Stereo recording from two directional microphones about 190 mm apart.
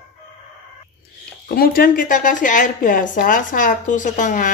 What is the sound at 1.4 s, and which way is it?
A woman's voice, 50° left (ahead or behind).